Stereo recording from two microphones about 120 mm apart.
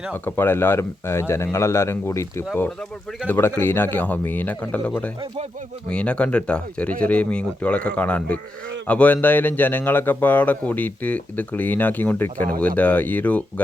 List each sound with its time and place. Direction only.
0.1 s speech: 15° left (ahead or behind)
5.9 s speech: 10° left (ahead or behind)